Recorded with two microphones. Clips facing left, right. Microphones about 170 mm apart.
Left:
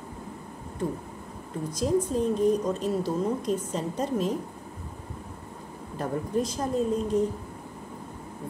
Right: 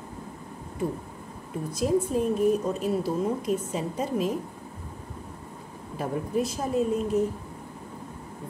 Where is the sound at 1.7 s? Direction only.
5° right (ahead or behind).